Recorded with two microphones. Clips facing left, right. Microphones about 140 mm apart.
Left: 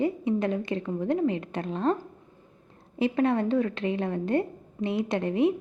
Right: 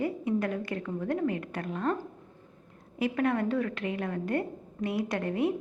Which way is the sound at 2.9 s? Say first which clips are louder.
Left 4 dB; 25° left (ahead or behind).